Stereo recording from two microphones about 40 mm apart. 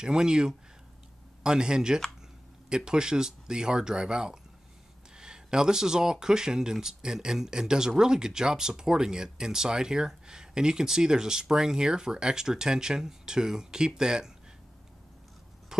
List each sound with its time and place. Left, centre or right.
0.0 s speech: centre